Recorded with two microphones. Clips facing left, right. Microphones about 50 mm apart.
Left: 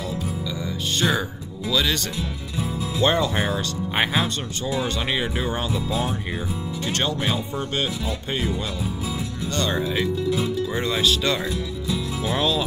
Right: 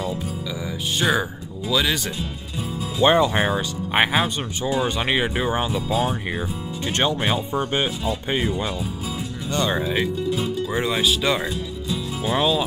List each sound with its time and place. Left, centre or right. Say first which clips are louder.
0.9 s speech: right 2 dB; centre